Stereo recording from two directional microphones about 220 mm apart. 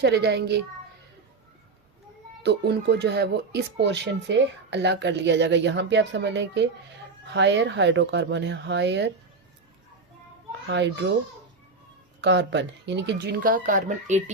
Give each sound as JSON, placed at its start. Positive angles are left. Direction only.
{"t": 0.0, "sound": "speech", "side_deg": -50}
{"t": 2.4, "sound": "speech", "side_deg": -50}
{"t": 10.7, "sound": "speech", "side_deg": -55}
{"t": 12.2, "sound": "speech", "side_deg": -50}